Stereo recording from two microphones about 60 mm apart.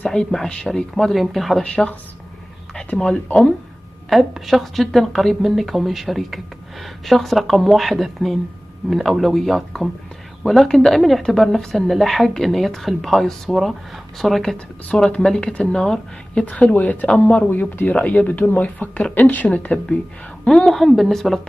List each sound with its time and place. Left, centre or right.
0.0 s a woman's voice: centre
1.6 s speech: centre
4.1 s a woman's voice: centre
14.9 s speech: centre
16.4 s speech: left
20.4 s a woman's voice: centre